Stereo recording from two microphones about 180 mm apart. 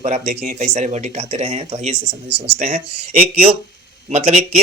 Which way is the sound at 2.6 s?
35° right (ahead or behind).